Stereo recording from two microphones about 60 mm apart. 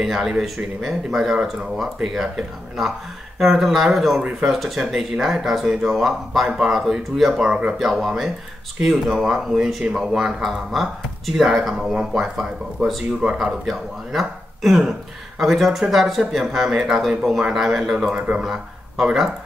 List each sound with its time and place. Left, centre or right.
0.0 s speech: centre
3.3 s speech: centre
7.4 s speech: centre
7.8 s speech: centre
18.4 s speech: centre